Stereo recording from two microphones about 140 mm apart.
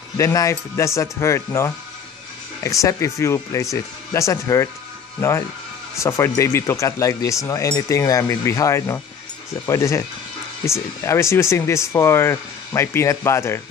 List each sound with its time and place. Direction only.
0.2 s speech: 25° left (ahead or behind)
5.9 s speech: 20° left (ahead or behind)